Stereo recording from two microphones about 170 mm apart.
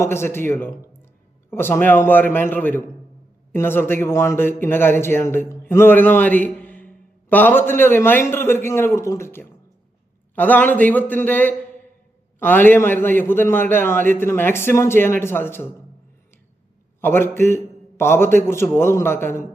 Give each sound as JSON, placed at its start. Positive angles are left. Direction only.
{"t": 0.0, "sound": "a man's voice", "side_deg": 15}
{"t": 17.0, "sound": "a man's voice", "side_deg": 15}